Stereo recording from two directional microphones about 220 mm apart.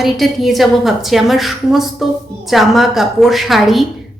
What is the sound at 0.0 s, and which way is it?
A woman's voice, centre (ahead or behind).